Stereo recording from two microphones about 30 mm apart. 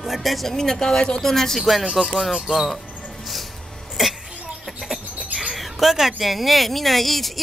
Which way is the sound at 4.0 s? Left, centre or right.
Centre.